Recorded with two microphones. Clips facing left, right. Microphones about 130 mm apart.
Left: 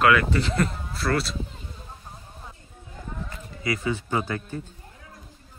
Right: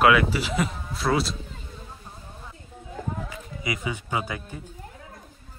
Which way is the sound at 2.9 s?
40° right (ahead or behind).